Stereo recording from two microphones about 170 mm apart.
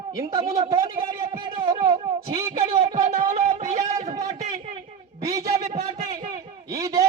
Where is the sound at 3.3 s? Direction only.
40° right (ahead or behind).